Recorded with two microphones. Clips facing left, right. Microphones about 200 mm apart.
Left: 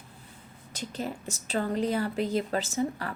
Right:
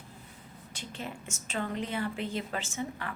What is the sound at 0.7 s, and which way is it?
A woman's voice, 40° left (ahead or behind).